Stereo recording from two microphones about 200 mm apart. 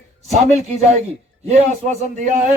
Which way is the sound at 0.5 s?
30° right (ahead or behind).